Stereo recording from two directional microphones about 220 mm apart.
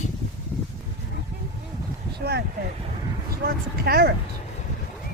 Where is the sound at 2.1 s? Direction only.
50° right (ahead or behind).